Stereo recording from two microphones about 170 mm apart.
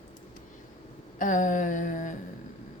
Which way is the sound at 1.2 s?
50° left (ahead or behind).